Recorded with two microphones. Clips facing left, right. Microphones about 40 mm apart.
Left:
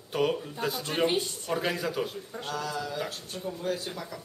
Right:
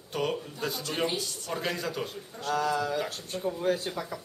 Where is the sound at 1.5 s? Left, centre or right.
Centre.